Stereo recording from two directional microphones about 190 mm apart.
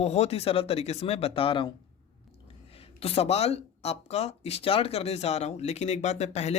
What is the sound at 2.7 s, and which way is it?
Speech, 30° left (ahead or behind).